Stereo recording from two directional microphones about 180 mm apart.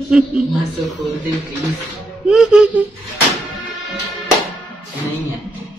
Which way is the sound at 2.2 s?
5° right (ahead or behind).